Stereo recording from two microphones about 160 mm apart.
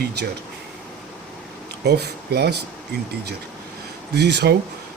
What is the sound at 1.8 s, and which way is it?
Speech, 90° right.